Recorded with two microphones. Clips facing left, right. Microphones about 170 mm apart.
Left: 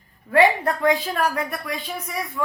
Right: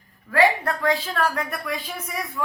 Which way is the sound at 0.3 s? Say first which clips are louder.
Left 2 dB; 25° left (ahead or behind).